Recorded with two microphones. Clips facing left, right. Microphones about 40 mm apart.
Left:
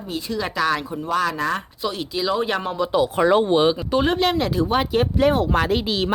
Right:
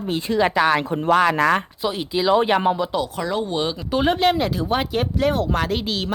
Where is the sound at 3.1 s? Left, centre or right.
Left.